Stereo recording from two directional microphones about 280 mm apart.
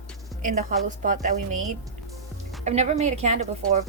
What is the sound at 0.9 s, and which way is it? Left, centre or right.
Speech, right.